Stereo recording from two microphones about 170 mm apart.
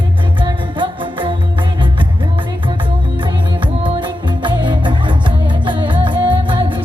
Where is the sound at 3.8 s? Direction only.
30° right (ahead or behind).